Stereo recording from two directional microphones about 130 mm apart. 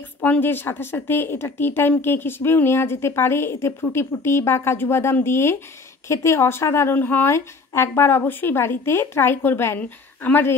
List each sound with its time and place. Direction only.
0.2 s a woman's voice: 15° left (ahead or behind)